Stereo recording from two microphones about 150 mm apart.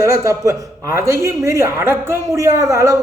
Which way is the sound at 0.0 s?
20° right (ahead or behind).